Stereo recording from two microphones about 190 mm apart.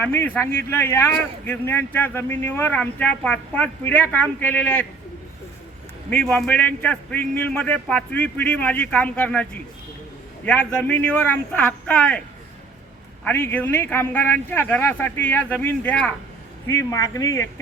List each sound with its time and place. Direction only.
0.0 s a man's voice: 10° left (ahead or behind)
6.1 s a man's voice: 5° left (ahead or behind)
13.2 s a man's voice: 10° left (ahead or behind)